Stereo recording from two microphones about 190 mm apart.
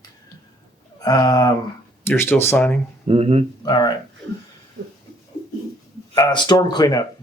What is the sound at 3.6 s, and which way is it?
Speech, 20° left (ahead or behind).